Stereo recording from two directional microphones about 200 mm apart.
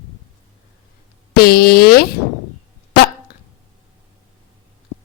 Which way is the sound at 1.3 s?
50° left (ahead or behind).